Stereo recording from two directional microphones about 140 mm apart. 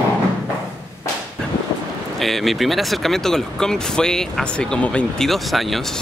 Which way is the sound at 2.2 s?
Centre (ahead or behind).